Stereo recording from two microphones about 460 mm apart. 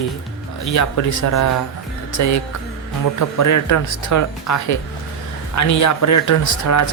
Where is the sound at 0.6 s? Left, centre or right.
Left.